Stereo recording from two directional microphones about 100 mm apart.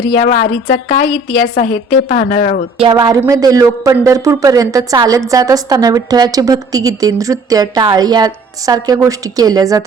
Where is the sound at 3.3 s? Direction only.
35° right (ahead or behind).